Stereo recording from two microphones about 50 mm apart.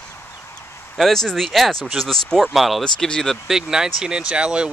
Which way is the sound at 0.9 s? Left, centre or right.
Centre.